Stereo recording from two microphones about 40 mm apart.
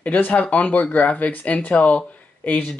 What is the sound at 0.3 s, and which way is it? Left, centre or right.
Speech, left.